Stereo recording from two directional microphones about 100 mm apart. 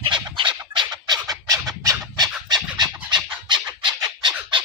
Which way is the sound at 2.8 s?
50° right (ahead or behind).